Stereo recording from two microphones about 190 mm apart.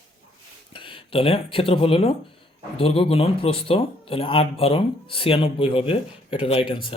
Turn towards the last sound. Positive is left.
turn(degrees=25)  # may be behind; listen again after turning